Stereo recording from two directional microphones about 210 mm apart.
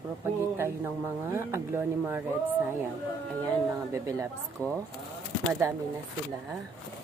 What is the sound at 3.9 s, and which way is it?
Speech, 15° right (ahead or behind).